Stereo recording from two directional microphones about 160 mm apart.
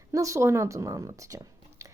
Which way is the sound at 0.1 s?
20° right (ahead or behind).